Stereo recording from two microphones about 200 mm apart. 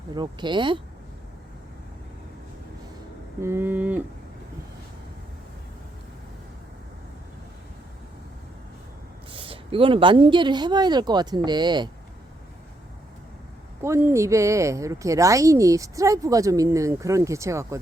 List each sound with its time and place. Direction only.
0.1 s speech: 20° right (ahead or behind)
3.4 s speech: 10° right (ahead or behind)
9.3 s speech: 25° right (ahead or behind)
13.8 s speech: 15° right (ahead or behind)